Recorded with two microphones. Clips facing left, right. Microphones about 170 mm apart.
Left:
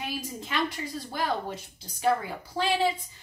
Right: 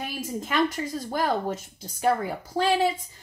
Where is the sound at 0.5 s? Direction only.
45° right (ahead or behind).